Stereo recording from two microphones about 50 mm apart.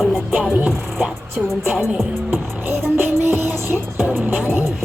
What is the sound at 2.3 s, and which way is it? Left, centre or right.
Music, right.